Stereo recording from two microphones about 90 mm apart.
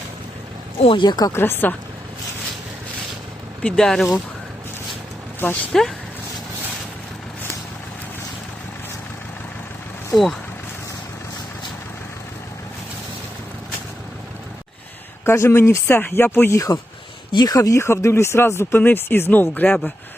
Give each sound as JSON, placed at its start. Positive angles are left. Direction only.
{"t": 0.8, "sound": "speech", "side_deg": 80}
{"t": 1.0, "sound": "speech", "side_deg": 50}
{"t": 1.3, "sound": "speech", "side_deg": 25}
{"t": 3.6, "sound": "speech", "side_deg": 15}
{"t": 3.8, "sound": "speech", "side_deg": 5}
{"t": 5.7, "sound": "speech", "side_deg": 5}
{"t": 10.1, "sound": "speech", "side_deg": 5}
{"t": 15.2, "sound": "speech", "side_deg": 25}
{"t": 19.6, "sound": "speech", "side_deg": 5}